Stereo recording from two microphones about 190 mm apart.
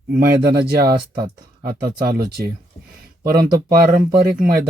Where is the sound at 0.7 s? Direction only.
55° right (ahead or behind).